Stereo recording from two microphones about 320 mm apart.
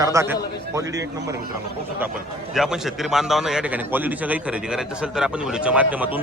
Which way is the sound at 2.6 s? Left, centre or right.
Centre.